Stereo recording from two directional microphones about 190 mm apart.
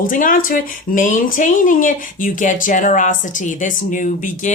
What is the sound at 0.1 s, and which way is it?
Speech, 45° left (ahead or behind).